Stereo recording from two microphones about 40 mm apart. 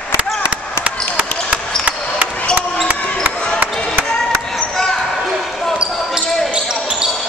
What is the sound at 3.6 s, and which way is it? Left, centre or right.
Music, right.